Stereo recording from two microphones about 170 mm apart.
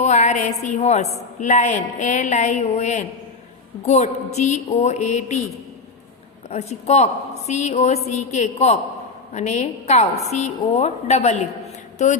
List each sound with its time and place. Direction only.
0.0 s a woman's voice: 40° left (ahead or behind)
6.5 s a woman's voice: 40° left (ahead or behind)